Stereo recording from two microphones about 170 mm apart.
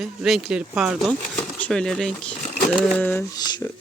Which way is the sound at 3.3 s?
25° left (ahead or behind).